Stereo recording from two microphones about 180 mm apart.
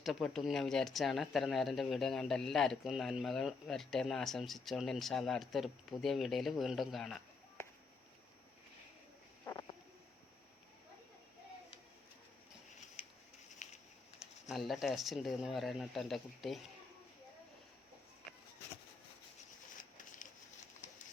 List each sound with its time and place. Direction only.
0.0 s speech: centre (ahead or behind)
13.6 s a sound: 45° left (ahead or behind)
14.5 s speech: centre (ahead or behind)